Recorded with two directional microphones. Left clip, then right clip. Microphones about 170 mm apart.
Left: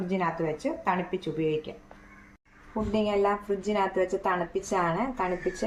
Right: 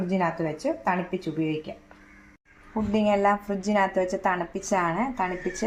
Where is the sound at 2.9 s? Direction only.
30° right (ahead or behind).